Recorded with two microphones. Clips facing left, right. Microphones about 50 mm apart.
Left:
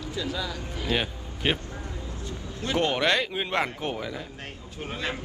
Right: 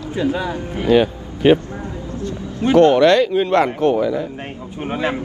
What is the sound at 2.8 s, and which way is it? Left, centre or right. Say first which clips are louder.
Speech: right 13 dB; centre.